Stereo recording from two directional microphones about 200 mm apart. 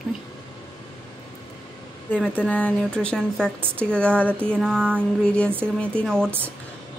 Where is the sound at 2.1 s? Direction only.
5° left (ahead or behind).